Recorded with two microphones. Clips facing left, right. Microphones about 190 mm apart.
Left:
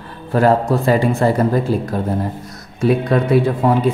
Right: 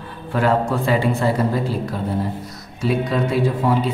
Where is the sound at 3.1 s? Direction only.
55° left (ahead or behind).